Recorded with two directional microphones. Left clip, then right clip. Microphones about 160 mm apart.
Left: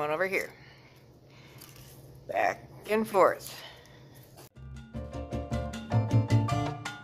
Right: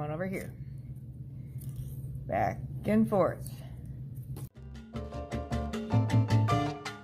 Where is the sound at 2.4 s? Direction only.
20° left (ahead or behind).